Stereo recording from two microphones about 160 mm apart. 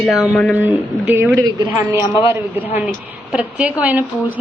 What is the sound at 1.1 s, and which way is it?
A woman's voice, 15° right (ahead or behind).